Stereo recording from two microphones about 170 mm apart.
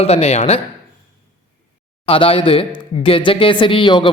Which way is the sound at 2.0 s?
35° left (ahead or behind).